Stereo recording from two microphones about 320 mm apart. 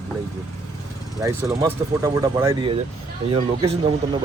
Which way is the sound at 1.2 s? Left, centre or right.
Centre.